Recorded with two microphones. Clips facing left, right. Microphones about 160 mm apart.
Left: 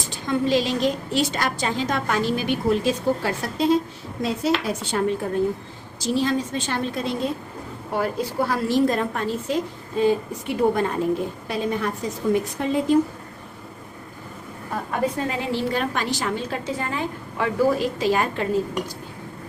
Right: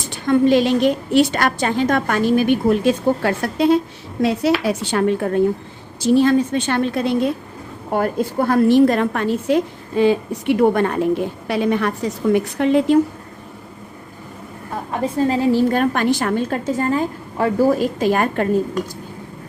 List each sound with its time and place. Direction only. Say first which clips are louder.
0.3 s a woman's voice: right 7 dB; 55° right (ahead or behind)
7.9 s a woman's voice: right 5 dB; 50° right (ahead or behind); by 13.0 s 70° right (ahead or behind)
15.2 s a woman's voice: right 8 dB; 30° right (ahead or behind)
15.5 s a woman's voice: right 7 dB; 50° right (ahead or behind)